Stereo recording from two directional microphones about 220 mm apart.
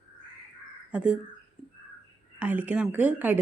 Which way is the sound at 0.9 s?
5° right (ahead or behind).